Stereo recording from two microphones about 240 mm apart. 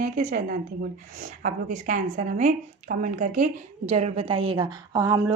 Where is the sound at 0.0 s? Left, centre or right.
Right.